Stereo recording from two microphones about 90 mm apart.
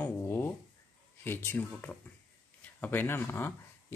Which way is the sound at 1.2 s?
25° left (ahead or behind).